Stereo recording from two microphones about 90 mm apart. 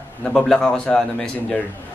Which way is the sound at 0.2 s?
10° left (ahead or behind).